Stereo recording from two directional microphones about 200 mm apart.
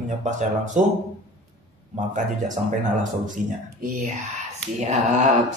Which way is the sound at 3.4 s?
40° right (ahead or behind).